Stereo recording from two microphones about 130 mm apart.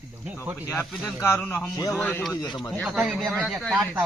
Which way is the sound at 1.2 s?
15° left (ahead or behind).